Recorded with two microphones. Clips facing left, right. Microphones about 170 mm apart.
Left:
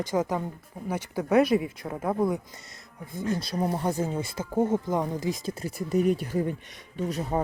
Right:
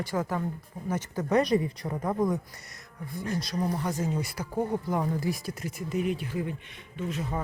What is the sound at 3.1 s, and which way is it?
Speech, 25° left (ahead or behind).